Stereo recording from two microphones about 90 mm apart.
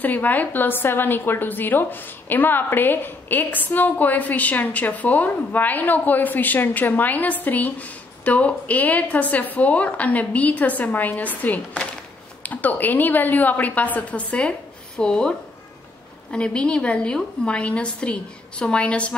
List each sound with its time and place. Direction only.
0.0 s a woman's voice: 20° left (ahead or behind)